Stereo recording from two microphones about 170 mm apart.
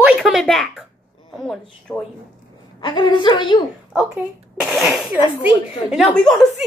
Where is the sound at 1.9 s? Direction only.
10° left (ahead or behind).